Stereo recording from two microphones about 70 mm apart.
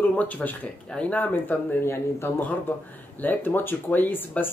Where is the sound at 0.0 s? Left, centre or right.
Left.